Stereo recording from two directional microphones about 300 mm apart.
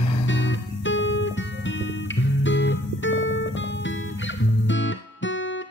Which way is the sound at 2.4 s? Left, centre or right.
Left.